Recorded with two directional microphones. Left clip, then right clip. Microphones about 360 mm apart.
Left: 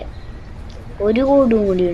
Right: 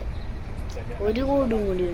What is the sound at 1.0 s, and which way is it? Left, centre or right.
Speech, right.